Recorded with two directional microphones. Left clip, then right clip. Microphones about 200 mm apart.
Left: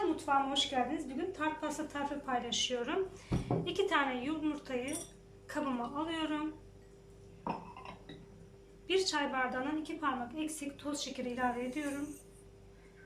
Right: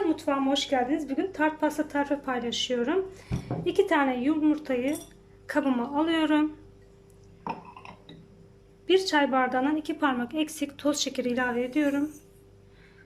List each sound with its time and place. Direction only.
0.3 s a woman's voice: 45° right (ahead or behind)
8.9 s a woman's voice: 40° right (ahead or behind)